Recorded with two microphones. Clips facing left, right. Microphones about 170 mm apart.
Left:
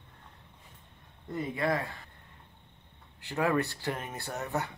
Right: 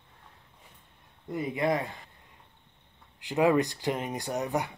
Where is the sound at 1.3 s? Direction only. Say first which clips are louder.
Right 3 dB; 20° right (ahead or behind).